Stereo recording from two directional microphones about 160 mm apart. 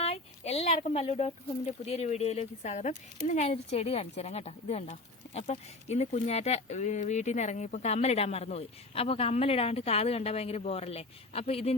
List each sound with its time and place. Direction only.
0.0 s speech: 40° left (ahead or behind)